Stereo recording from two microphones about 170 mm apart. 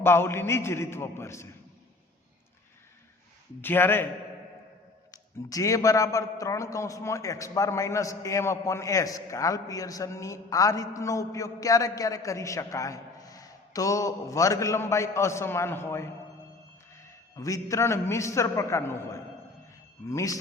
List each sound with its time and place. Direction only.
0.0 s a man's voice: 15° left (ahead or behind)
3.6 s a man's voice: 10° left (ahead or behind)
5.1 s a man's voice: 20° left (ahead or behind)